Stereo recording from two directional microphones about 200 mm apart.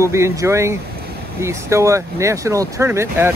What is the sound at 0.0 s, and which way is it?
Speech, 15° right (ahead or behind).